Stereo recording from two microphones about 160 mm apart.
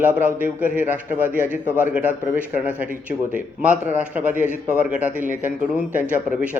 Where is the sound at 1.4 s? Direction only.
15° left (ahead or behind).